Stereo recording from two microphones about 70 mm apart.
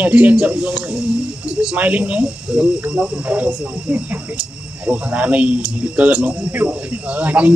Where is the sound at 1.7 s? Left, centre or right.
Right.